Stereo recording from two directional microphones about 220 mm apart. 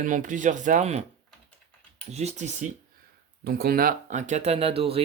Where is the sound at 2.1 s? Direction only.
30° right (ahead or behind).